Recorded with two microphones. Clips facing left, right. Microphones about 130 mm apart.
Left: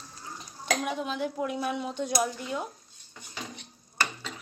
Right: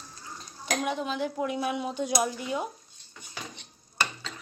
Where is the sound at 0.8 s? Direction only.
Centre (ahead or behind).